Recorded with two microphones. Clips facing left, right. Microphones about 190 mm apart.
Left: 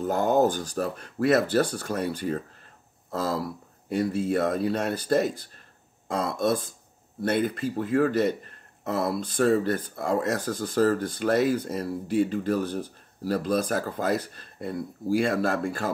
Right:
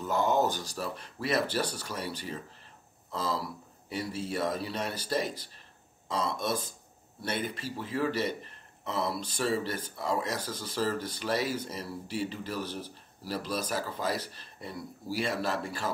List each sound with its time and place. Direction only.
0.0 s speech: 50° left (ahead or behind)
7.7 s speech: 50° left (ahead or behind)